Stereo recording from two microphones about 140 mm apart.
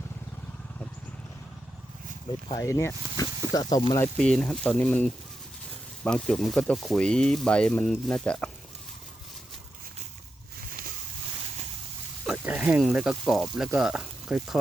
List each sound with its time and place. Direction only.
2.6 s speech: 20° left (ahead or behind)
4.2 s speech: 5° left (ahead or behind)
10.7 s vehicle: 90° right
12.2 s speech: 5° right (ahead or behind)